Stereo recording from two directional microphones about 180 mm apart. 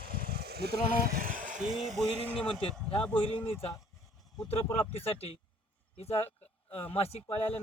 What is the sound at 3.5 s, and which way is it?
Speech, 35° left (ahead or behind).